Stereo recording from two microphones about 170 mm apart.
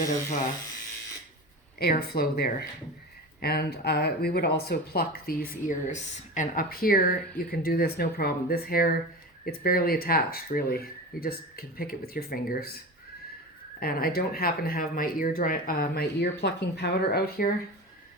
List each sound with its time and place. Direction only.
0.3 s speech: 45° left (ahead or behind)
1.8 s speech: 65° left (ahead or behind)
5.9 s speech: 45° left (ahead or behind); by 12.7 s 60° left (ahead or behind)
13.7 s speech: 60° left (ahead or behind)